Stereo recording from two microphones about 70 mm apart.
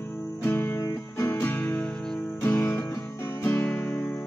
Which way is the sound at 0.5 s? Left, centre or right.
Left.